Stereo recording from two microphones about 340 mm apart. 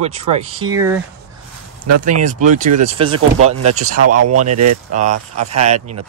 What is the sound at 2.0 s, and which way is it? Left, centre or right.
Speech, right.